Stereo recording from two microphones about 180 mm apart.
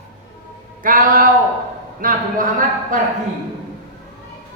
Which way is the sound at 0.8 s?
50° right (ahead or behind).